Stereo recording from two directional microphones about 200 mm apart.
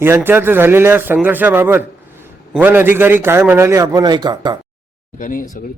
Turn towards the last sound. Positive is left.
turn(degrees=40)  # may be behind; listen again after turning